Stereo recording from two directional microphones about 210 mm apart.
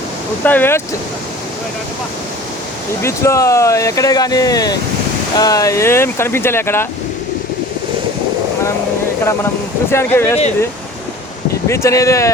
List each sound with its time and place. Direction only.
0.4 s speech: 10° left (ahead or behind)
3.0 s speech: 15° left (ahead or behind)
9.9 s speech: 10° left (ahead or behind)
11.7 s speech: 15° left (ahead or behind)